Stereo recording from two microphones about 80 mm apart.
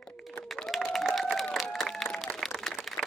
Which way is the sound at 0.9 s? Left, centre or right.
Centre.